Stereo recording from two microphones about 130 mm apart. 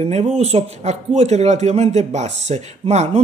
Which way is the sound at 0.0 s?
55° right (ahead or behind).